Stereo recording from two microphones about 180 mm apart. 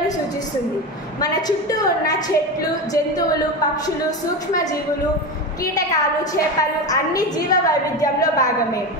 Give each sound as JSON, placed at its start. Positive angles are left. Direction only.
{"t": 1.2, "sound": "a woman's voice", "side_deg": 20}
{"t": 6.6, "sound": "a woman's voice", "side_deg": 20}